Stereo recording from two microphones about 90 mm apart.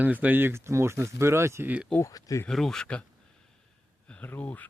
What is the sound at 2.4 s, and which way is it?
Speech, 5° left (ahead or behind).